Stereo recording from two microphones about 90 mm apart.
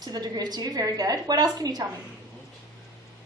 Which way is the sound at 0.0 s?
45° right (ahead or behind).